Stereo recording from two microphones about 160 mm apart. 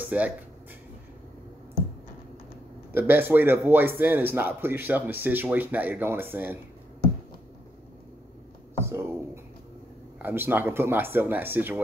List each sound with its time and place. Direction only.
0.1 s a man's voice: 10° right (ahead or behind)
2.9 s a man's voice: 15° right (ahead or behind)
8.8 s a sound: 15° right (ahead or behind)
10.1 s a man's voice: 10° right (ahead or behind)